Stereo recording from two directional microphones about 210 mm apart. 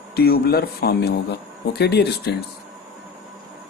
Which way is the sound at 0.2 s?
45° left (ahead or behind).